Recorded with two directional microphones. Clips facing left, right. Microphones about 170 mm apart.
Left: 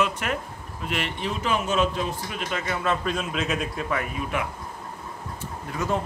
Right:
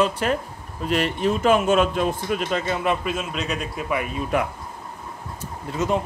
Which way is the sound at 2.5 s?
25° right (ahead or behind).